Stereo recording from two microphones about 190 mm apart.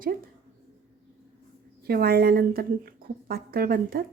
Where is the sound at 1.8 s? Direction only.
55° right (ahead or behind).